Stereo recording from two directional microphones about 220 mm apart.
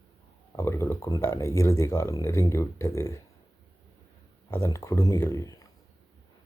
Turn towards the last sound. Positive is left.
turn(degrees=15)  # may be behind; listen again after turning